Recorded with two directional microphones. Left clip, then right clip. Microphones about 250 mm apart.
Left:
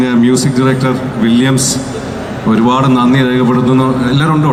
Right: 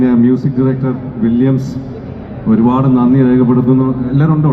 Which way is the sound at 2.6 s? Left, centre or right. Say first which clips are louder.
Left 2 dB; left.